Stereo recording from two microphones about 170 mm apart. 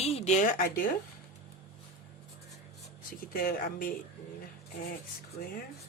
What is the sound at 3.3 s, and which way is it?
Speech, 55° left (ahead or behind).